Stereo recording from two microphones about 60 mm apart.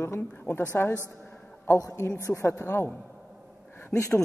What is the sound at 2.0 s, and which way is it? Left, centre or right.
Speech, left.